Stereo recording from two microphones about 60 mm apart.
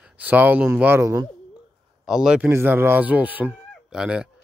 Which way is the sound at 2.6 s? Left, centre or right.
Right.